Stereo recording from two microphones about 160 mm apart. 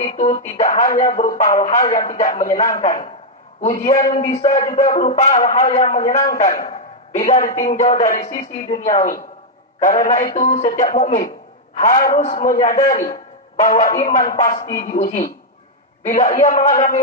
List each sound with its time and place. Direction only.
0.0 s speech: 50° left (ahead or behind)
7.2 s speech: 45° left (ahead or behind)